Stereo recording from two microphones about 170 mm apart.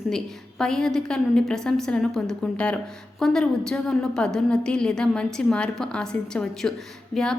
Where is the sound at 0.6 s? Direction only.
5° left (ahead or behind).